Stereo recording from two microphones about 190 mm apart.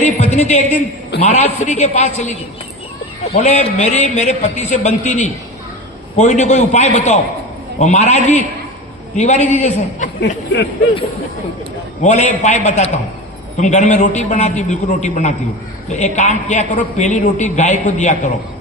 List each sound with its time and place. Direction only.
0.0 s a sound: 40° left (ahead or behind)
1.2 s a man's voice: 35° left (ahead or behind)
3.4 s a man's voice: 40° left (ahead or behind)
10.2 s speech: 65° left (ahead or behind)
12.0 s a man's voice: 40° left (ahead or behind)